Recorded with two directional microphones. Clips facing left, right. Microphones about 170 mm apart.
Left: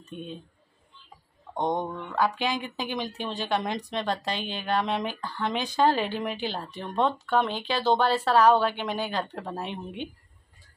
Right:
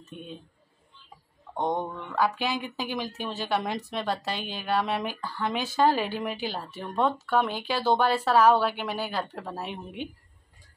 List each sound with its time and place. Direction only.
1.8 s speech: 20° left (ahead or behind)
2.1 s a woman's voice: 5° right (ahead or behind)